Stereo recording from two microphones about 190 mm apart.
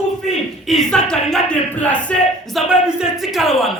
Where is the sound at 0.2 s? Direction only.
35° left (ahead or behind).